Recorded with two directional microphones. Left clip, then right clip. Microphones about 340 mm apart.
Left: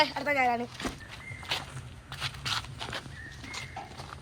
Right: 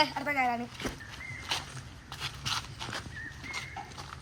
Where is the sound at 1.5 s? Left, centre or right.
Centre.